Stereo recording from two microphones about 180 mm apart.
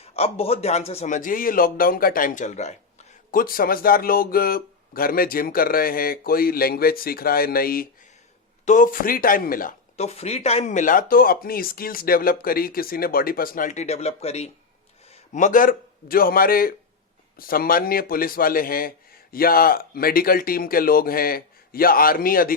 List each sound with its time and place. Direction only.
0.0 s a man's voice: 35° left (ahead or behind)
3.3 s a man's voice: 55° left (ahead or behind)
10.0 s a man's voice: 35° left (ahead or behind); by 22.5 s 55° left (ahead or behind)